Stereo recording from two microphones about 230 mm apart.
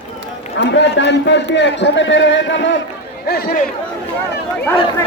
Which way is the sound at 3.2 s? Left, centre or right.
Left.